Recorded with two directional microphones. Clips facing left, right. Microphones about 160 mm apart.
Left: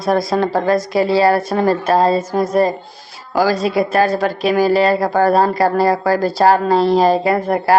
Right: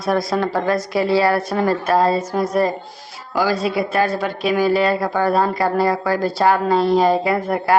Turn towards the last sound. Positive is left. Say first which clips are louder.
# left 3 dB
turn(degrees=40)  # may be behind; listen again after turning